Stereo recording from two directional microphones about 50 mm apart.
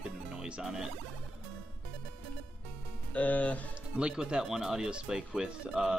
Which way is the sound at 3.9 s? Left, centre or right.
Centre.